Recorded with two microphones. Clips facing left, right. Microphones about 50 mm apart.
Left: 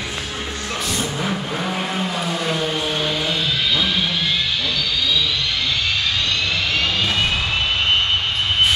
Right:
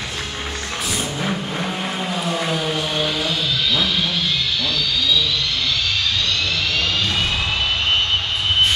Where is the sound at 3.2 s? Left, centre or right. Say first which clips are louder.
Even; centre.